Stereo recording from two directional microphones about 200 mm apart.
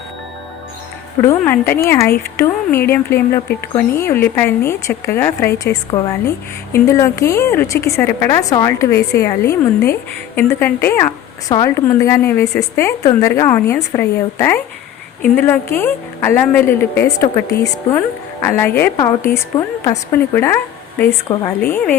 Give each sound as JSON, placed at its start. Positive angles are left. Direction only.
{"t": 1.3, "sound": "a woman's voice", "side_deg": 10}
{"t": 21.6, "sound": "a woman's voice", "side_deg": 10}